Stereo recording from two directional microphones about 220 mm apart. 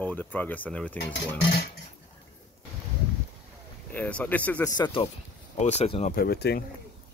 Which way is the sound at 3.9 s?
5° left (ahead or behind).